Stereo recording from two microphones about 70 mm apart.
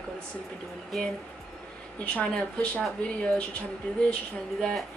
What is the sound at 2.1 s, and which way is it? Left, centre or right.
Speech, centre.